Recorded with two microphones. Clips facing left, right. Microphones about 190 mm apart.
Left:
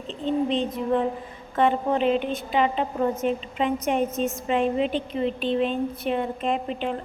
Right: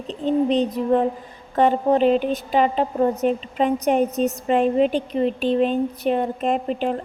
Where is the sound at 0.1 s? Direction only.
40° right (ahead or behind).